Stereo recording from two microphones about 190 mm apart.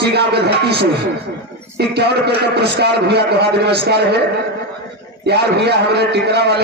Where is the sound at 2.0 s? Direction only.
60° right (ahead or behind).